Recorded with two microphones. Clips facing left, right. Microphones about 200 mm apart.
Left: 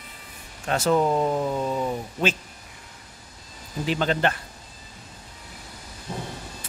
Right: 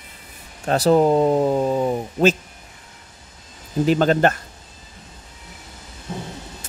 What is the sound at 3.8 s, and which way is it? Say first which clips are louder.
Speech: right 7 dB; 45° right (ahead or behind).